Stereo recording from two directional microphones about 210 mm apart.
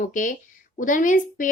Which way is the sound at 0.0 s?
40° left (ahead or behind).